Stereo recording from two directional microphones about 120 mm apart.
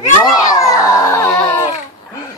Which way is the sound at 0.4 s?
30° left (ahead or behind).